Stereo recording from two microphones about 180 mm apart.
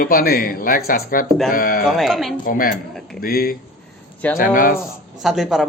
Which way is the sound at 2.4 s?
50° left (ahead or behind).